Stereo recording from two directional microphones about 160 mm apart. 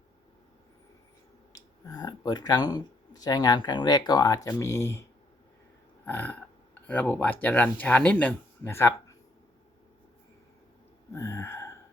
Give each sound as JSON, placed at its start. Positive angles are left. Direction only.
{"t": 1.5, "sound": "speech", "side_deg": 25}
{"t": 6.1, "sound": "speech", "side_deg": 10}
{"t": 11.1, "sound": "a sound", "side_deg": 15}